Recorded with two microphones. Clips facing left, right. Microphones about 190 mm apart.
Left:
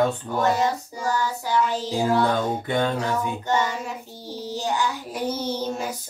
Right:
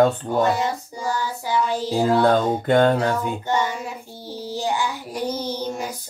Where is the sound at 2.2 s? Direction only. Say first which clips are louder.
Right 5 dB; 65° right (ahead or behind).